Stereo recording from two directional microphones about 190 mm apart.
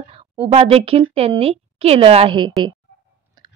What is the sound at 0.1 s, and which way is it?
A woman's voice, 30° right (ahead or behind).